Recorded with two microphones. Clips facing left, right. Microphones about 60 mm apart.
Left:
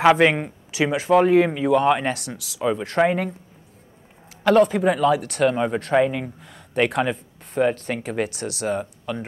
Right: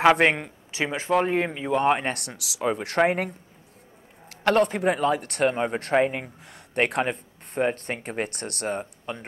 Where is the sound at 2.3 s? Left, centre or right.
Right.